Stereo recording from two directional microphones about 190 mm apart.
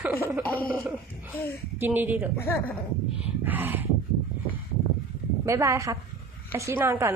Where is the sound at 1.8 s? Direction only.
10° right (ahead or behind).